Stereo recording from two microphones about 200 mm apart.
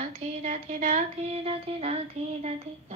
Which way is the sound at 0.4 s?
35° right (ahead or behind).